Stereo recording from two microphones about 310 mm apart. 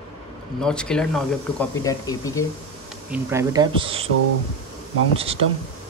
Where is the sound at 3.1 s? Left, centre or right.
Centre.